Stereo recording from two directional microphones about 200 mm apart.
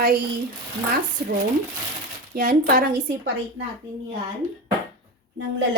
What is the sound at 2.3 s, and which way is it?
Speech, 45° right (ahead or behind).